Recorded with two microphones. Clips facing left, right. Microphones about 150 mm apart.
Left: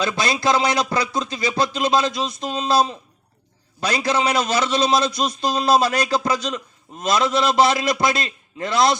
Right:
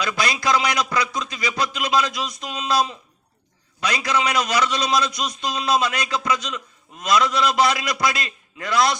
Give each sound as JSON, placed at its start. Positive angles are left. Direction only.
{"t": 0.0, "sound": "a man's voice", "side_deg": 25}